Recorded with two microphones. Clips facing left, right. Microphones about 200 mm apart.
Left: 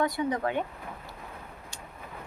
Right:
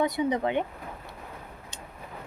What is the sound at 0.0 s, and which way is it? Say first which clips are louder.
Speech: right 2 dB; 20° right (ahead or behind).